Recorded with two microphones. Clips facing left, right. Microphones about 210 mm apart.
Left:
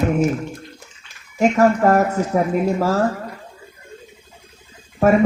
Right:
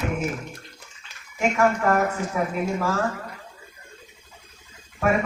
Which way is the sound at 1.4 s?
40° left (ahead or behind).